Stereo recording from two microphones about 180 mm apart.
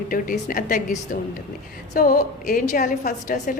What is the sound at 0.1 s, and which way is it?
A woman's voice, 50° left (ahead or behind).